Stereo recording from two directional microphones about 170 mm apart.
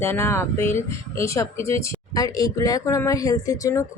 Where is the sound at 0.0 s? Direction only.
15° left (ahead or behind).